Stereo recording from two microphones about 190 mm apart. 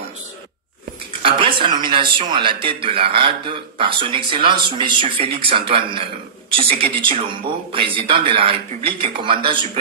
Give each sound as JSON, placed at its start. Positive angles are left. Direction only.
{"t": 1.2, "sound": "speech", "side_deg": -30}